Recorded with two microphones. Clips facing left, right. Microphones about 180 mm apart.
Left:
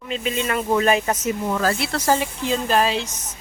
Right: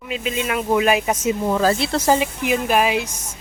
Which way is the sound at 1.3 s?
25° right (ahead or behind).